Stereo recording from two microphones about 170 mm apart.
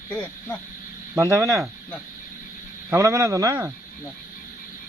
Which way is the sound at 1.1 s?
20° right (ahead or behind).